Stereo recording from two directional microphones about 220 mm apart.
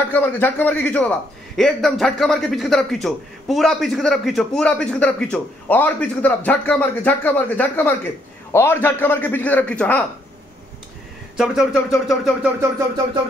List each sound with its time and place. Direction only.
0.1 s a man's voice: 10° left (ahead or behind)
11.3 s a man's voice: 5° right (ahead or behind)
12.7 s a sound: 15° right (ahead or behind)